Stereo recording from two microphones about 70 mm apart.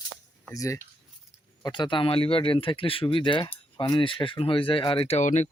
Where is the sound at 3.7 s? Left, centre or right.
Left.